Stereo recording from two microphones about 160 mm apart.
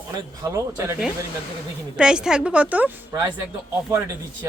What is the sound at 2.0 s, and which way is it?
A man's voice, 5° right (ahead or behind).